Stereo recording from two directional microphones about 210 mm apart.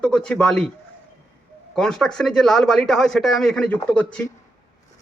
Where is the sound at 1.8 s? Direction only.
5° left (ahead or behind).